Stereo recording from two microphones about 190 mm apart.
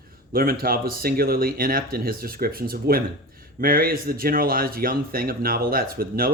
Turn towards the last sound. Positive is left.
turn(degrees=-50)  # may be behind; listen again after turning